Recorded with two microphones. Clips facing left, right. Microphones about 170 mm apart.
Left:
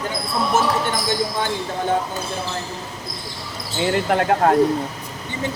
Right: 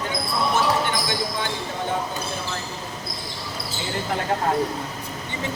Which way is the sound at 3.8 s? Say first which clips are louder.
Left 9 dB; 65° left (ahead or behind).